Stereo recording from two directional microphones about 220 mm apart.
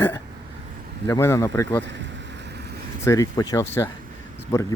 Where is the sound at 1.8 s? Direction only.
55° right (ahead or behind).